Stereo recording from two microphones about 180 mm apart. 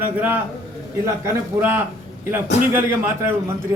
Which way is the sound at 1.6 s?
10° right (ahead or behind).